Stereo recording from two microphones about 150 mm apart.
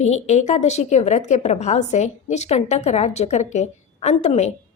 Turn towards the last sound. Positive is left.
turn(degrees=45)  # may be behind; listen again after turning